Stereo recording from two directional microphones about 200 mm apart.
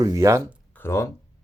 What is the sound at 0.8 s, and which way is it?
Speech, 15° left (ahead or behind).